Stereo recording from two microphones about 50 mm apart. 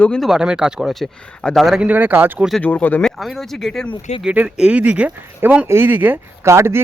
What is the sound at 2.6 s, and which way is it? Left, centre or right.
Speech, left.